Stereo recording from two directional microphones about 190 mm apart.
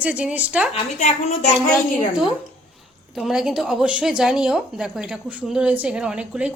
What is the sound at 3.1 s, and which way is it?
A woman's voice, centre (ahead or behind).